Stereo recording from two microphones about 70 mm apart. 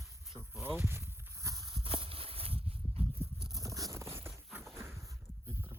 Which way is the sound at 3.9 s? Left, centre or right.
Right.